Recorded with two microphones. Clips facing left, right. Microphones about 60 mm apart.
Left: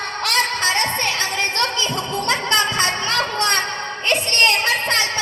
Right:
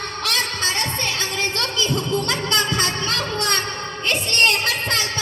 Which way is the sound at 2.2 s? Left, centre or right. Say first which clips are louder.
Left 3 dB; left.